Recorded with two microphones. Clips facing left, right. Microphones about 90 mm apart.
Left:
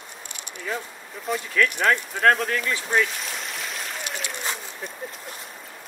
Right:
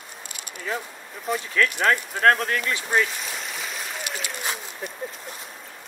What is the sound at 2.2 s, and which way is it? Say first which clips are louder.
Speech: right 1 dB; 35° right (ahead or behind).